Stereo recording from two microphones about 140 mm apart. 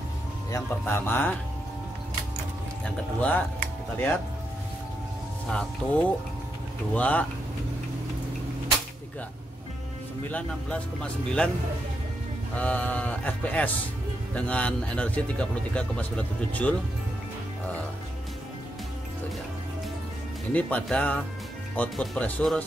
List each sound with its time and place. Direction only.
0.5 s speech: 20° left (ahead or behind)
2.8 s speech: 10° left (ahead or behind)
5.5 s speech: 5° left (ahead or behind)
10.3 s speech: 5° left (ahead or behind)
12.5 s speech: 10° left (ahead or behind)
20.5 s speech: 10° left (ahead or behind)